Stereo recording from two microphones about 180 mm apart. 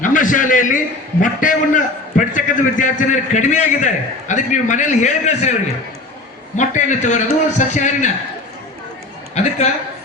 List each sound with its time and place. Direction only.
0.0 s a sound: 45° left (ahead or behind)
1.2 s a man's voice: 45° left (ahead or behind)
6.6 s a man's voice: 40° left (ahead or behind)
9.3 s a woman's voice: 40° left (ahead or behind)